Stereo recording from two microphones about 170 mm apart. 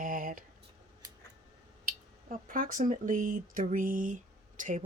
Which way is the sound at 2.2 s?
50° right (ahead or behind).